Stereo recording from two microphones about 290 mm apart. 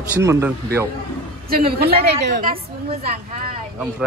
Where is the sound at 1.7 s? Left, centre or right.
Right.